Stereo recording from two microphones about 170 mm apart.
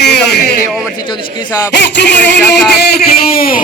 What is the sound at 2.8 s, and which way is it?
Speech, 70° left (ahead or behind).